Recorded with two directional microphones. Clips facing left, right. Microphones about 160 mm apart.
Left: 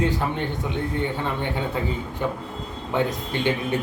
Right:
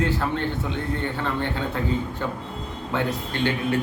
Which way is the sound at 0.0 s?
15° left (ahead or behind).